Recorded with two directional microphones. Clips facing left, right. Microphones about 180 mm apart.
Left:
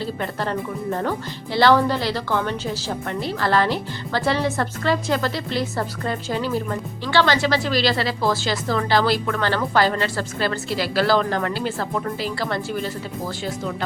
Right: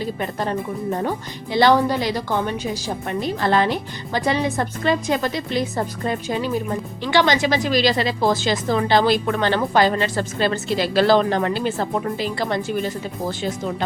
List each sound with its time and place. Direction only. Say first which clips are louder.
0.0 s a woman's voice: right 1 dB; 15° right (ahead or behind)